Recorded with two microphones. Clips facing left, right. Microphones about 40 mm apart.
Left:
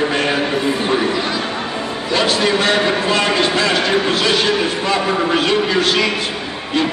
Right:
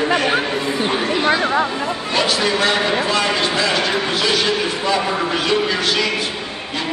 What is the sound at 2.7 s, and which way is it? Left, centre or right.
Speech, centre.